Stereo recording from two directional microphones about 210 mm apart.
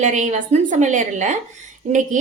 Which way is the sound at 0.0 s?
35° right (ahead or behind).